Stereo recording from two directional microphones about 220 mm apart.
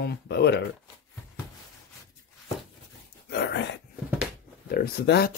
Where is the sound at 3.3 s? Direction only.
50° left (ahead or behind).